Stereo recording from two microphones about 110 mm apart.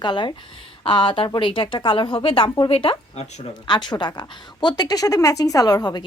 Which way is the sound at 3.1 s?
85° left.